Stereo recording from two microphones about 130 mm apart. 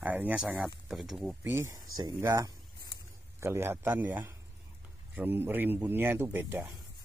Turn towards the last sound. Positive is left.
turn(degrees=-15)  # may be behind; listen again after turning